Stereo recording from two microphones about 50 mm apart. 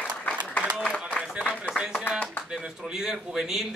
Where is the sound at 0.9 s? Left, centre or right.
Left.